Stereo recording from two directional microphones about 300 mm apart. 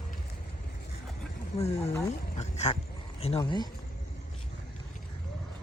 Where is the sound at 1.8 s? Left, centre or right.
Centre.